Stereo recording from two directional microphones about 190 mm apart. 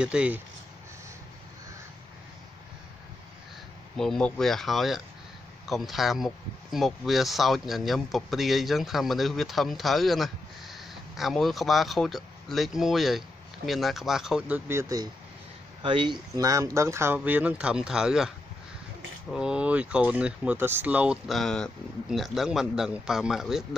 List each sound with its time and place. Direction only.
0.0 s speech: 5° right (ahead or behind)
3.9 s speech: centre (ahead or behind)
14.7 s speech: 15° right (ahead or behind)
19.3 s speech: 5° right (ahead or behind)